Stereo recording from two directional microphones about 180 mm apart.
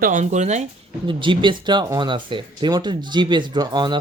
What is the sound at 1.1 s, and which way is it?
Speech, 25° right (ahead or behind).